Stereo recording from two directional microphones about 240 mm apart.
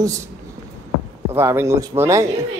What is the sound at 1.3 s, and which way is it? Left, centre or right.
Speech, centre.